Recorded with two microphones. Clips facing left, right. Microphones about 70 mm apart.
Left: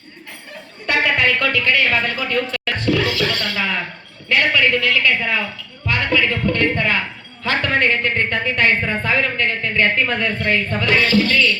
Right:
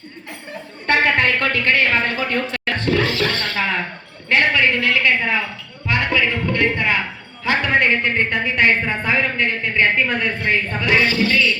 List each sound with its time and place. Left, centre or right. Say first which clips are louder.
0.9 s speech: right 1 dB; right
4.3 s a sound: even; right
5.8 s a woman's voice: even; right